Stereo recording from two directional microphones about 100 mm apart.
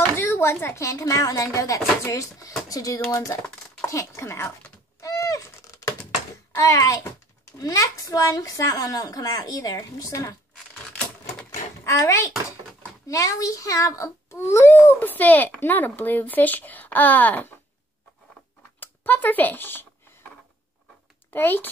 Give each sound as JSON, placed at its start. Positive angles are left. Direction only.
{"t": 0.1, "sound": "a woman's voice", "side_deg": 25}
{"t": 5.0, "sound": "owl", "side_deg": 35}
{"t": 6.5, "sound": "a child's voice", "side_deg": 30}
{"t": 11.8, "sound": "a child's voice", "side_deg": 30}
{"t": 18.8, "sound": "speech", "side_deg": 15}
{"t": 21.3, "sound": "a child's voice", "side_deg": 20}